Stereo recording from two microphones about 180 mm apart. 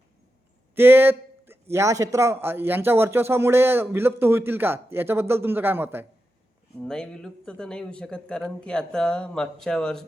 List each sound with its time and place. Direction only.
0.8 s speech: 10° right (ahead or behind)
6.8 s speech: 5° left (ahead or behind)